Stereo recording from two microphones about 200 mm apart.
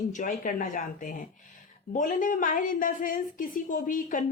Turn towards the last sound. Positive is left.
turn(degrees=40)  # may be behind; listen again after turning